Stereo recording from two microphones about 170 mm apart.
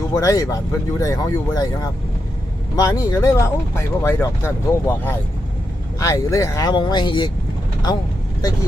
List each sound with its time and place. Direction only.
0.1 s speech: 20° left (ahead or behind)